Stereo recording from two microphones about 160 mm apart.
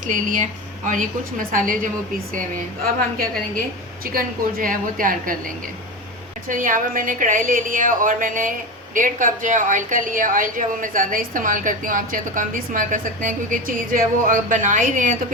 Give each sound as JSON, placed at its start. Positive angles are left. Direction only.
{"t": 0.1, "sound": "a woman's voice", "side_deg": -50}
{"t": 4.0, "sound": "a woman's voice", "side_deg": -65}
{"t": 6.5, "sound": "a woman's voice", "side_deg": -55}